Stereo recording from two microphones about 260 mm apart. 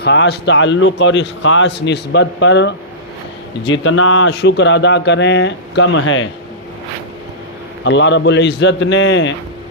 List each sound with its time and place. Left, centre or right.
0.0 s a man's voice: left
7.9 s a man's voice: left